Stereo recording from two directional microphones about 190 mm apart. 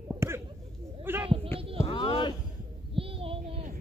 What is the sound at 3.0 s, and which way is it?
Child singing, 30° right (ahead or behind).